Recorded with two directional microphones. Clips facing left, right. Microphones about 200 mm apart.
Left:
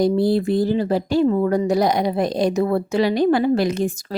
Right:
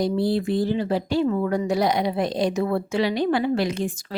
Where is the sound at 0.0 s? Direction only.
45° left (ahead or behind).